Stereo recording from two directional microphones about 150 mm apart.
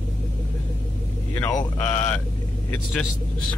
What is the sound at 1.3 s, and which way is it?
Speech, 15° left (ahead or behind).